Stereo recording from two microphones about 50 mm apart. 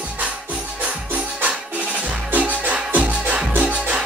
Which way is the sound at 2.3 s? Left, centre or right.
Right.